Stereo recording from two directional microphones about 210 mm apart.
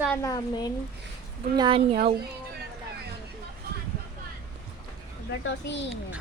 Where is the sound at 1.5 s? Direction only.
25° right (ahead or behind).